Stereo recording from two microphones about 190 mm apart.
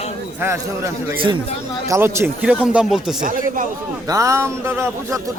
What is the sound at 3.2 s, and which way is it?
Speech, 45° right (ahead or behind).